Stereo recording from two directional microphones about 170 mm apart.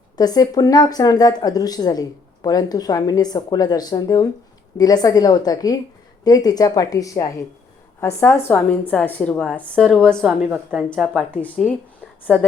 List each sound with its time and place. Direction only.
0.2 s a woman's voice: 20° left (ahead or behind); by 10.8 s 5° right (ahead or behind)
11.3 s a woman's voice: 10° left (ahead or behind)